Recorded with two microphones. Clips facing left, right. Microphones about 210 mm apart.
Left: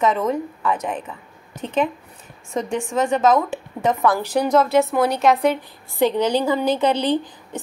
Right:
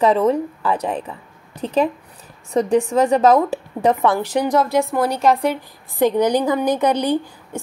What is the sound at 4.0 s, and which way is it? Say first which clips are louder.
A woman's voice: right 1 dB; 25° right (ahead or behind).